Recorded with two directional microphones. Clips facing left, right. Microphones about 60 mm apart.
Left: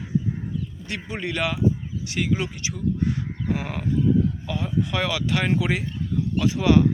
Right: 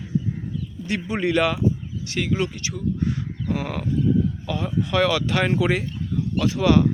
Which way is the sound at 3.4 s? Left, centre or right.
Centre.